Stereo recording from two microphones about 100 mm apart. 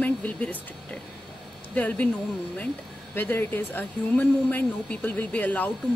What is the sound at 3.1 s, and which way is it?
Speech, 20° left (ahead or behind).